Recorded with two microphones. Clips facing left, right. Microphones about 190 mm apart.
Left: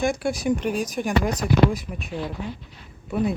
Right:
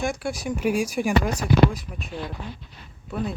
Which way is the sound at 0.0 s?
5° right (ahead or behind).